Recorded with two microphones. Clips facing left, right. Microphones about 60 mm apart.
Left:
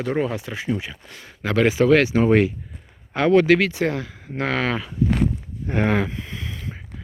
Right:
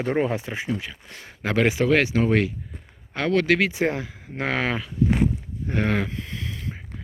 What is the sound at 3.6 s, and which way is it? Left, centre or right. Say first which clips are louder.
Speech: left 1 dB; right.